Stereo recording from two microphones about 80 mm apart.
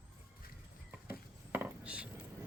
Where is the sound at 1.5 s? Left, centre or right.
Centre.